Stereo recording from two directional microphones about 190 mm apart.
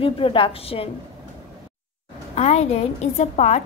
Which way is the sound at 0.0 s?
30° left (ahead or behind).